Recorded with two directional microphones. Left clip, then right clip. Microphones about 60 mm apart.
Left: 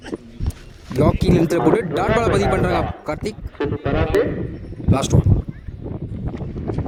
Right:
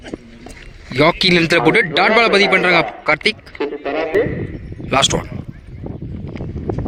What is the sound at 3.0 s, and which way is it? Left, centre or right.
Speech, centre.